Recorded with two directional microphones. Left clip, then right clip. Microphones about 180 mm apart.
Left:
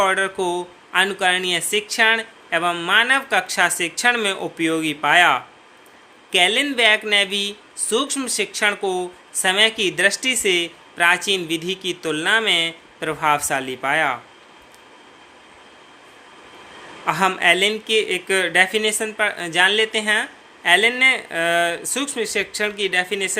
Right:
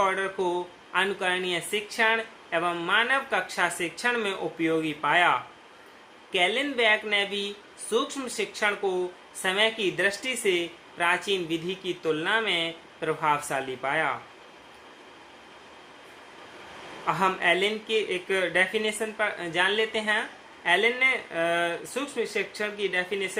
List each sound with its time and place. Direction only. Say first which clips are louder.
0.0 s speech: left 7 dB; 55° left (ahead or behind)
17.1 s speech: left 7 dB; 55° left (ahead or behind)